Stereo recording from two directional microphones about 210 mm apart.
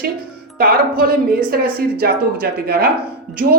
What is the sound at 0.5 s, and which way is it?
Speech, 45° right (ahead or behind).